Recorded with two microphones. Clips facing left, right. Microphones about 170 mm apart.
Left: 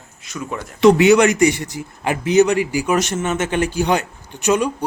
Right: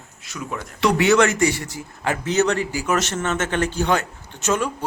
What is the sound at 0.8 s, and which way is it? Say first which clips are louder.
A man's voice: left 6 dB; 20° left (ahead or behind).